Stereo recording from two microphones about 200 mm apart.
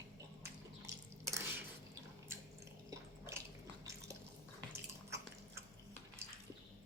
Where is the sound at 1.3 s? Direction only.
10° right (ahead or behind).